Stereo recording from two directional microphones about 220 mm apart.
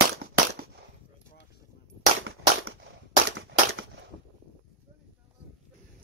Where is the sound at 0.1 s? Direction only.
45° right (ahead or behind).